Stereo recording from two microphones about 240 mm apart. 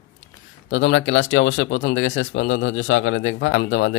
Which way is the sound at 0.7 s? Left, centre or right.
Left.